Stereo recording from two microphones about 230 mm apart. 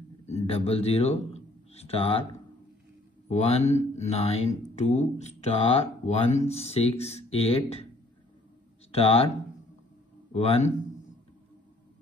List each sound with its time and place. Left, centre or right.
0.5 s a man's voice: left
3.3 s speech: left
8.9 s speech: left
10.3 s speech: left